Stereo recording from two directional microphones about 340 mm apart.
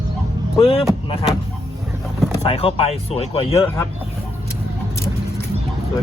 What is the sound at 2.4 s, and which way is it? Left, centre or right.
Speech, centre.